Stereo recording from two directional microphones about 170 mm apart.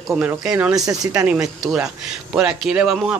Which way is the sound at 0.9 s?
20° right (ahead or behind).